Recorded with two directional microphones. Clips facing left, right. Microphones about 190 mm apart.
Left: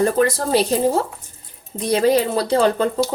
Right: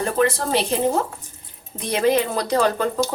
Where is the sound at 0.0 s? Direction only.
40° left (ahead or behind).